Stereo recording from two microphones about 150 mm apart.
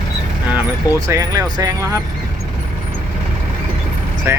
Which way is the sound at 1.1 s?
20° right (ahead or behind).